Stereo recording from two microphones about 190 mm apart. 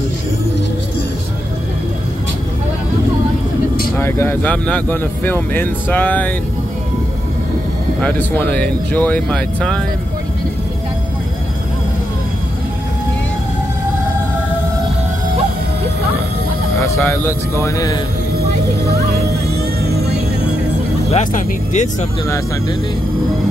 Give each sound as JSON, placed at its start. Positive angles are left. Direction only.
{"t": 3.9, "sound": "speech", "side_deg": 10}
{"t": 8.0, "sound": "speech", "side_deg": 10}
{"t": 16.8, "sound": "speech", "side_deg": 15}
{"t": 19.5, "sound": "music", "side_deg": -55}
{"t": 21.1, "sound": "speech", "side_deg": 40}